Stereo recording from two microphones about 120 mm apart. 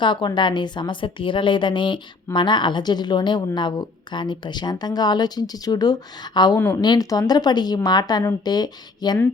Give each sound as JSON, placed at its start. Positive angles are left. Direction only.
{"t": 0.0, "sound": "a woman's voice", "side_deg": 40}